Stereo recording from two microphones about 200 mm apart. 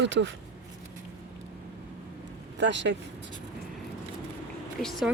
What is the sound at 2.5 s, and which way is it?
Speech, 60° right (ahead or behind).